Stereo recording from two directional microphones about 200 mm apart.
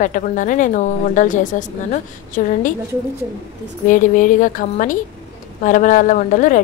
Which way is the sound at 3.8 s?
40° left (ahead or behind).